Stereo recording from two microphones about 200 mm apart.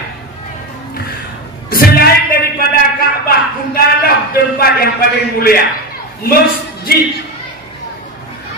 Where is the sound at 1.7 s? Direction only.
45° left (ahead or behind).